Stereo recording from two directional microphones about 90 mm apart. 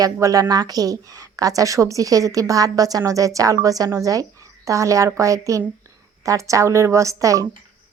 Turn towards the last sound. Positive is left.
turn(degrees=-35)  # may be behind; listen again after turning